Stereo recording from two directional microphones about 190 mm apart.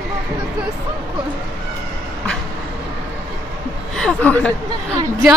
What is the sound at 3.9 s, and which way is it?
Speech, 5° left (ahead or behind).